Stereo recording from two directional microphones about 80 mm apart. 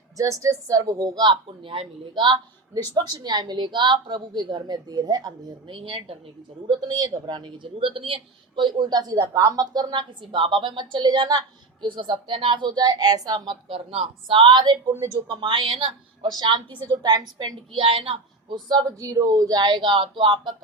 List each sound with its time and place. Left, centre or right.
0.2 s speech: right
15.1 s a woman's voice: right
16.3 s a woman's voice: right
17.0 s speech: right
18.9 s speech: right